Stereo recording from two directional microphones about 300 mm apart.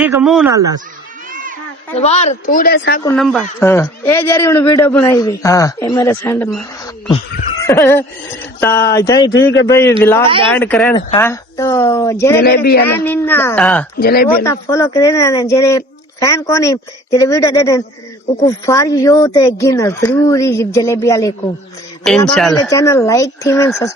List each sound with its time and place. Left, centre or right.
0.0 s speech: centre
1.3 s a sound: right
2.0 s speech: left
3.2 s a man's voice: centre
7.6 s a sound: centre
8.6 s a man's voice: centre
12.4 s speech: left
12.9 s a man's voice: centre
14.0 s speech: left
14.4 s a man's voice: centre